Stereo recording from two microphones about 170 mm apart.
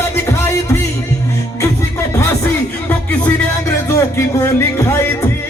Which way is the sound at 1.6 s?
15° left (ahead or behind).